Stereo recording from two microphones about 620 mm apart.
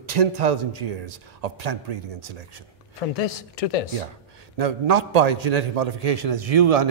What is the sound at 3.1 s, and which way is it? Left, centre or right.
Speech, left.